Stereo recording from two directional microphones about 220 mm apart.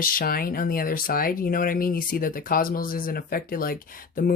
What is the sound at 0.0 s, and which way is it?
Speech, 40° left (ahead or behind).